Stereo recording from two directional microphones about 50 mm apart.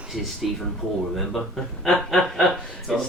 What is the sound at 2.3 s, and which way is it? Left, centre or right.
Speech, centre.